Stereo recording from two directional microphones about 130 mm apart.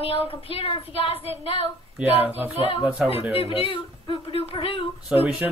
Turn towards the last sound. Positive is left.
turn(degrees=-5)  # may be behind; listen again after turning